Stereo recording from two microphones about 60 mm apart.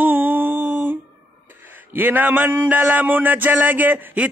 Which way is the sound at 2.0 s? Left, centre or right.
Right.